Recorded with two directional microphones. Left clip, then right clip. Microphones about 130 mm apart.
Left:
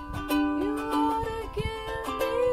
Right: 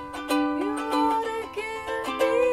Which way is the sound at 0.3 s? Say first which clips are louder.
Right 2 dB; 25° right (ahead or behind).